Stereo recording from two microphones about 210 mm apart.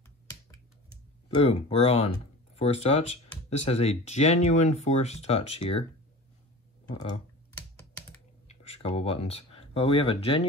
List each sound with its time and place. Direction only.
1.3 s speech: 30° left (ahead or behind)
7.5 s computer keyboard: 10° left (ahead or behind)
8.5 s speech: 30° left (ahead or behind)